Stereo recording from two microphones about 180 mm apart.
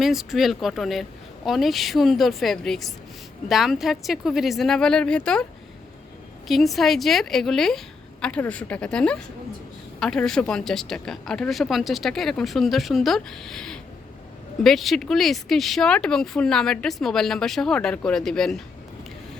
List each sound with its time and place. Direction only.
0.0 s speech: centre (ahead or behind)
6.5 s speech: centre (ahead or behind)